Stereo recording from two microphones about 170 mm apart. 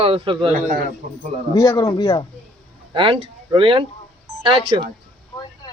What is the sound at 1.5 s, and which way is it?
Speech, 20° left (ahead or behind).